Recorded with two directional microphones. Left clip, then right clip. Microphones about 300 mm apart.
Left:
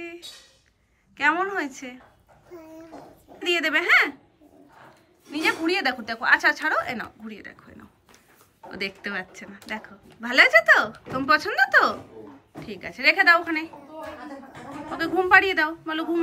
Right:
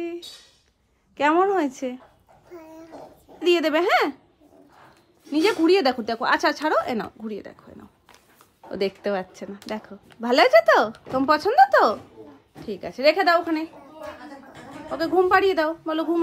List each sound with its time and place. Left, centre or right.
1.1 s speech: right
2.5 s a sound: centre
3.4 s a woman's voice: centre
5.3 s a woman's voice: right
13.7 s a sound: centre
15.1 s a woman's voice: centre